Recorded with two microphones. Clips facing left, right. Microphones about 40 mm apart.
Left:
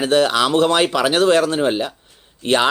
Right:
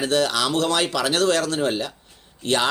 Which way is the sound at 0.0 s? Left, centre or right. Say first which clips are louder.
Left 5 dB; left.